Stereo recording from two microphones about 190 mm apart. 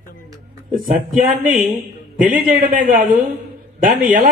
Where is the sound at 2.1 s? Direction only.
45° right (ahead or behind).